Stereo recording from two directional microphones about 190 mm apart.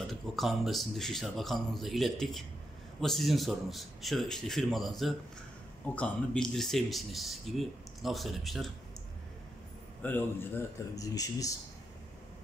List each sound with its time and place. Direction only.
0.1 s speech: centre (ahead or behind)
10.0 s speech: 10° left (ahead or behind)